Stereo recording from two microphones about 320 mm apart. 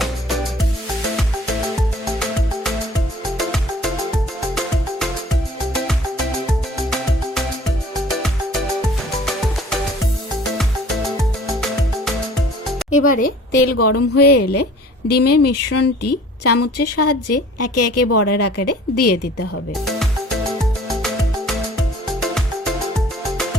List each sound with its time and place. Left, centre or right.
3.3 s music: centre
6.5 s music: centre
10.6 s music: centre
13.1 s a woman's voice: left
13.7 s speech: left
20.8 s music: centre